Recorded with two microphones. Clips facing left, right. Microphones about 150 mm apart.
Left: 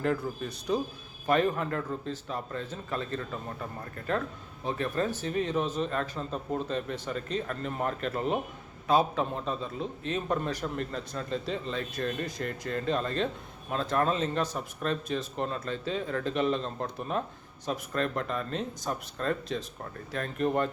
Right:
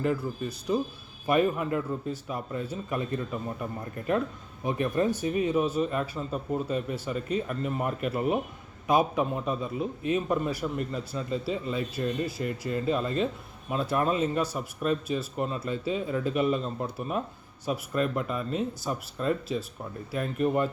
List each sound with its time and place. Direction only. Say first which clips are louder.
0.0 s a man's voice: right 1 dB; 5° right (ahead or behind)